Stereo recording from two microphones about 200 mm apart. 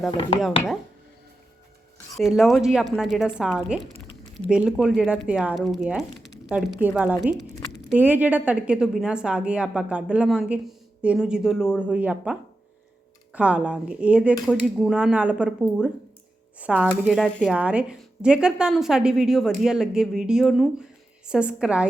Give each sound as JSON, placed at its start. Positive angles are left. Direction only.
{"t": 0.1, "sound": "speech", "side_deg": 25}
{"t": 2.1, "sound": "a woman's voice", "side_deg": 0}
{"t": 16.6, "sound": "a woman's voice", "side_deg": -5}